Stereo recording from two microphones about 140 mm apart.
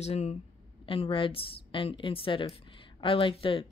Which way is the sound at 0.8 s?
40° left (ahead or behind).